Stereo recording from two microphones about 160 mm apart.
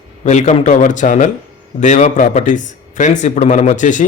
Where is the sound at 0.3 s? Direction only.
45° left (ahead or behind).